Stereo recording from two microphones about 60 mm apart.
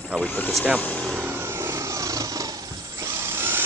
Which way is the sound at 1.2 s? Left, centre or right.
Right.